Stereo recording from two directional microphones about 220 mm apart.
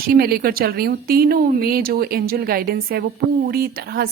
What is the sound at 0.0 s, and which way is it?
Speech, 40° right (ahead or behind).